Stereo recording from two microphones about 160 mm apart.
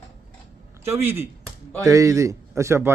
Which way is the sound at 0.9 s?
15° right (ahead or behind).